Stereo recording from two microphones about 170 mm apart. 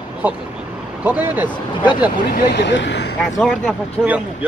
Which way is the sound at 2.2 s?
65° left (ahead or behind).